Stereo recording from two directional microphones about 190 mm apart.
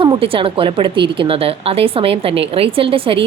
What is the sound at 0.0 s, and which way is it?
A woman's voice, 30° right (ahead or behind).